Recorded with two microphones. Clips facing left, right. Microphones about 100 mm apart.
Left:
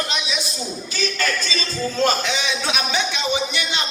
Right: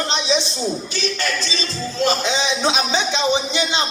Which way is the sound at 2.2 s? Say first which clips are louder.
Right 4 dB; 20° right (ahead or behind).